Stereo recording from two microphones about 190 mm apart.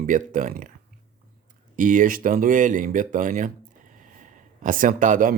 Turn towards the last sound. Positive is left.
turn(degrees=-45)  # may be behind; listen again after turning